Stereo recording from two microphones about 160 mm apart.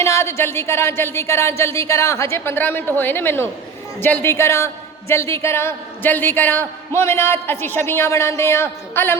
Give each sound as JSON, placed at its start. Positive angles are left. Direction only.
{"t": 0.0, "sound": "a woman's voice", "side_deg": 15}